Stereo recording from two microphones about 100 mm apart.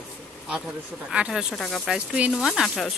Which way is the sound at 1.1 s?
5° right (ahead or behind).